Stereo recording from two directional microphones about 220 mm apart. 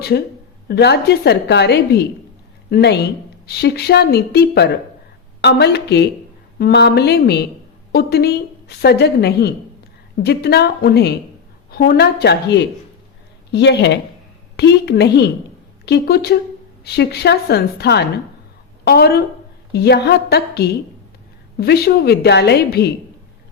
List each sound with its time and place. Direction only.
0.7 s a woman's voice: 50° left (ahead or behind)